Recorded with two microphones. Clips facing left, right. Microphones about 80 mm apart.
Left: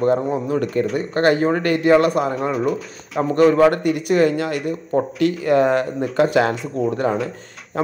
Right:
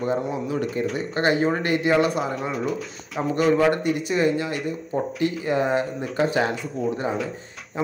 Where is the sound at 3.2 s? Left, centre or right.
Left.